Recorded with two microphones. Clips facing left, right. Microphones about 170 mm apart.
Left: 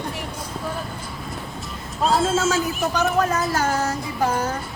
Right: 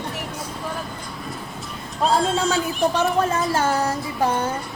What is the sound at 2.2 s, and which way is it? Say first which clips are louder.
Speech: left 1 dB; 5° left (ahead or behind).